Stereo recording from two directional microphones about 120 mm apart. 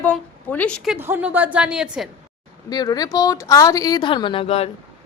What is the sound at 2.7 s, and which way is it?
A woman's voice, 30° left (ahead or behind).